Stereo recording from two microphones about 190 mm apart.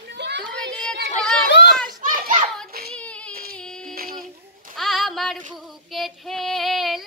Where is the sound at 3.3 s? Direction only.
50° right (ahead or behind).